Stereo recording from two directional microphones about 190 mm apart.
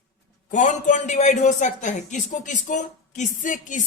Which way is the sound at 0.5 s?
40° left (ahead or behind).